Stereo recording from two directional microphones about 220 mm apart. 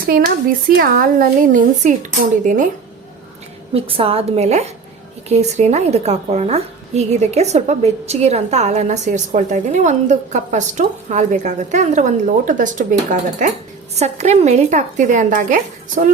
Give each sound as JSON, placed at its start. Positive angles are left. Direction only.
{"t": 0.8, "sound": "a woman's voice", "side_deg": -40}
{"t": 3.8, "sound": "a woman's voice", "side_deg": -25}